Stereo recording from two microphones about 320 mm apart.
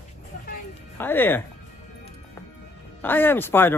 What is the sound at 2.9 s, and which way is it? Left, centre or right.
Speech, centre.